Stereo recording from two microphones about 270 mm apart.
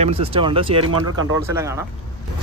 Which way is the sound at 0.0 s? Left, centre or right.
Right.